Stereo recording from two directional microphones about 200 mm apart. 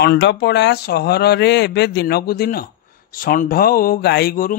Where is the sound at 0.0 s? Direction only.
55° left (ahead or behind).